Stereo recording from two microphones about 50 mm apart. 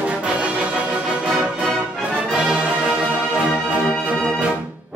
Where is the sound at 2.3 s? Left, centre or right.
Centre.